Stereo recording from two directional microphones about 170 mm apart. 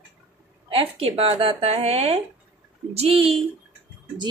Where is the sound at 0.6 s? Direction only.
30° right (ahead or behind).